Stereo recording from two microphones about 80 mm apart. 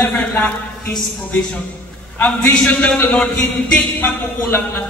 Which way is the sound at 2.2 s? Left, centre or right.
Centre.